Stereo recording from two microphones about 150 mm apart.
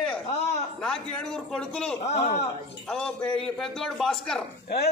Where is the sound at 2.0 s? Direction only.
45° left (ahead or behind).